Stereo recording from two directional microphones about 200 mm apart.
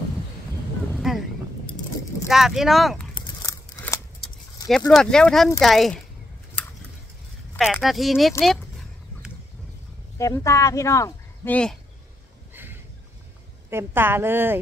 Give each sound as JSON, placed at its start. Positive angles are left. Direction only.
{"t": 0.9, "sound": "a sound", "side_deg": 0}
{"t": 2.2, "sound": "speech", "side_deg": 0}
{"t": 3.4, "sound": "scissors", "side_deg": 15}
{"t": 4.6, "sound": "speech", "side_deg": 0}
{"t": 7.5, "sound": "speech", "side_deg": 0}
{"t": 10.1, "sound": "speech", "side_deg": 15}
{"t": 13.7, "sound": "a woman's voice", "side_deg": -10}